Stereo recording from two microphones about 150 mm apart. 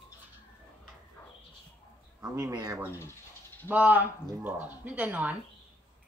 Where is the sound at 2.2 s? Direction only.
20° right (ahead or behind).